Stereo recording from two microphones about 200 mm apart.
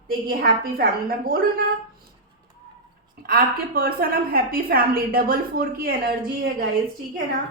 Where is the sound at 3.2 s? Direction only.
50° right (ahead or behind).